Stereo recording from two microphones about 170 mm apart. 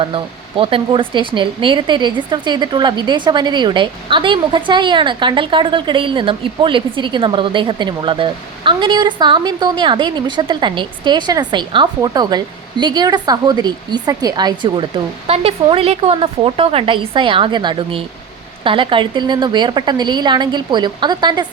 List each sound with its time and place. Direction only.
0.0 s speech: 30° right (ahead or behind)